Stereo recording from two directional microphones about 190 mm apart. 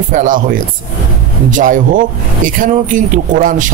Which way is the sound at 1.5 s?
45° right (ahead or behind).